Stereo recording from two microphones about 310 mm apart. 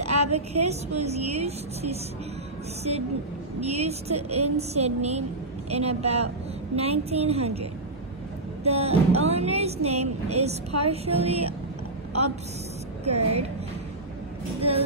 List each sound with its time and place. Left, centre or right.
0.3 s speech: right
3.6 s speech: centre
8.6 s speech: centre
13.0 s speech: centre